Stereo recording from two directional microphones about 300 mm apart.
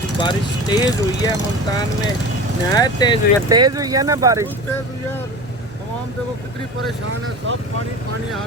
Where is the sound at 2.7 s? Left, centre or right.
Centre.